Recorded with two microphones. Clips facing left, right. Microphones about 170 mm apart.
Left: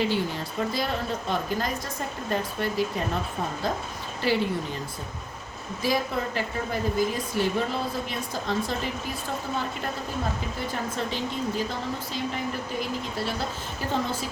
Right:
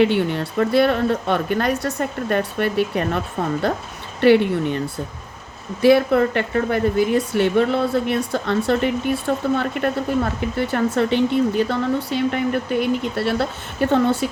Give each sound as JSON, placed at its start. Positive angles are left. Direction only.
{"t": 0.0, "sound": "speech", "side_deg": -65}
{"t": 5.8, "sound": "speech", "side_deg": -70}